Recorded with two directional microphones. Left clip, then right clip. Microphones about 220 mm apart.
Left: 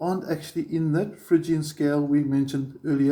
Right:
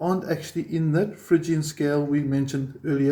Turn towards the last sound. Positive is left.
turn(degrees=10)  # may be behind; listen again after turning